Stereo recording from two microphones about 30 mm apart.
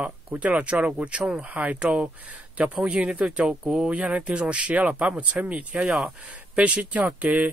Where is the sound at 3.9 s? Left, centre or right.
Right.